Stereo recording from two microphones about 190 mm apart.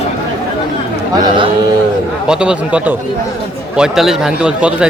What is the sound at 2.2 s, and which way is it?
A man's voice, 5° right (ahead or behind).